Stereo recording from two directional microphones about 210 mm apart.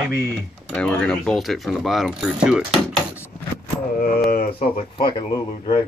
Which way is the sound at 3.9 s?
45° left (ahead or behind).